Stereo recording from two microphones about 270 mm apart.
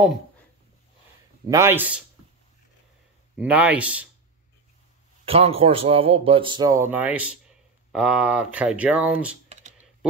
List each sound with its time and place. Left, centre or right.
1.5 s speech: centre
3.3 s speech: centre
5.2 s a man's voice: right; by 9.4 s centre
9.5 s computer keyboard: right